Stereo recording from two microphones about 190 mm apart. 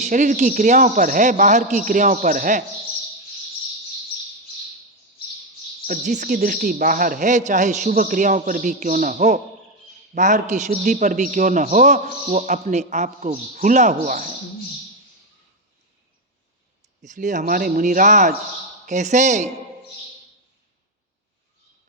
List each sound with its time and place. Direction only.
0.0 s speech: 40° right (ahead or behind)
5.8 s speech: 45° right (ahead or behind)
17.0 s speech: 40° right (ahead or behind)